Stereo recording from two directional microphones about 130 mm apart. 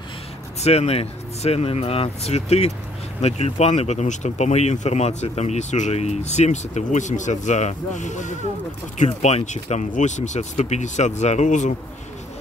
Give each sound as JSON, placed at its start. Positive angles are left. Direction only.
{"t": 0.6, "sound": "speech", "side_deg": 55}